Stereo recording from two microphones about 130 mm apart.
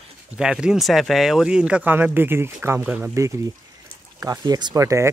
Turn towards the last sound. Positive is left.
turn(degrees=-25)  # may be behind; listen again after turning